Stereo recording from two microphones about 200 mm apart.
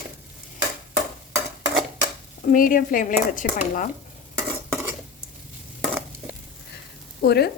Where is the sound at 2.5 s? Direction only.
45° left (ahead or behind).